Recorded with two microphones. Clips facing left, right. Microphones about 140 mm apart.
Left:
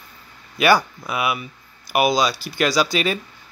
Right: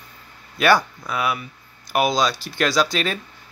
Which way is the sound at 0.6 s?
5° left (ahead or behind).